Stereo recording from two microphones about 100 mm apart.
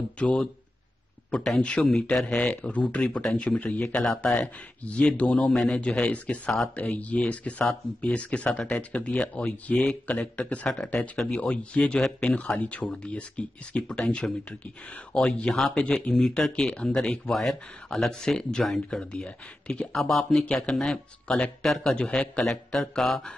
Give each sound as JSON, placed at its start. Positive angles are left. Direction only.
{"t": 0.2, "sound": "speech", "side_deg": 10}